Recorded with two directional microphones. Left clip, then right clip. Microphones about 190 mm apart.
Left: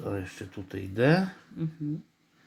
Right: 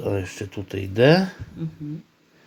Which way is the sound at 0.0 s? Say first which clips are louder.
Right 8 dB; 25° right (ahead or behind).